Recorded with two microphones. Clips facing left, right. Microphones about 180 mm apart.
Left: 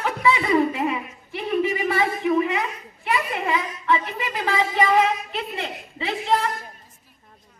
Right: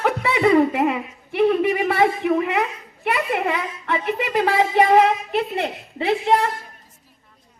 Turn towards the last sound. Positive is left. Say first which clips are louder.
# right 5 dB
turn(degrees=-55)  # may be behind; listen again after turning